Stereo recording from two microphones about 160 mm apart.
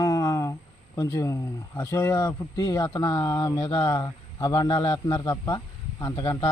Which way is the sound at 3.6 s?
35° left (ahead or behind).